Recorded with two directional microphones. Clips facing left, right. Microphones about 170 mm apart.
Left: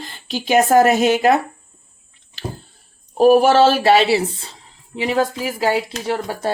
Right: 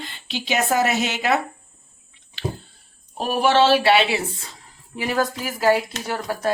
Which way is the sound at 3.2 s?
45° left (ahead or behind).